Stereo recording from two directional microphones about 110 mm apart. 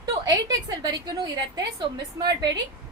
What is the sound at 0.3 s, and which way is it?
A woman's voice, 40° right (ahead or behind).